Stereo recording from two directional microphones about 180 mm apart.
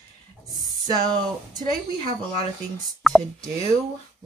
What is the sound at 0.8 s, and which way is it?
Speech, 20° right (ahead or behind).